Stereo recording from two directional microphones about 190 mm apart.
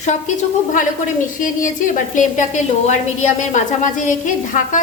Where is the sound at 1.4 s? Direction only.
45° left (ahead or behind).